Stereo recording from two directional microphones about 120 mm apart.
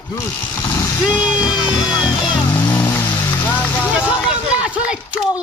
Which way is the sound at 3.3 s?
15° left (ahead or behind).